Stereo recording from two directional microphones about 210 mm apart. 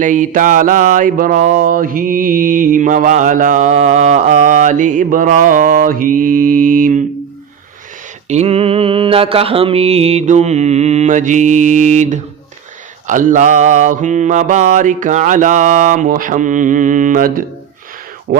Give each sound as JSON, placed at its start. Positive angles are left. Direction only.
{"t": 0.0, "sound": "mantra", "side_deg": -40}
{"t": 8.3, "sound": "mantra", "side_deg": -30}
{"t": 18.3, "sound": "speech", "side_deg": -40}